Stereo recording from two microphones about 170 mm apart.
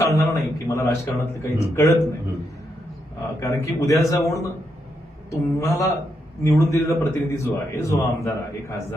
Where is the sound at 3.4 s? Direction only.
20° left (ahead or behind).